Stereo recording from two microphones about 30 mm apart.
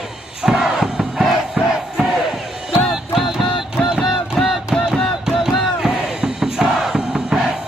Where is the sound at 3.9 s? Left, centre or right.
Centre.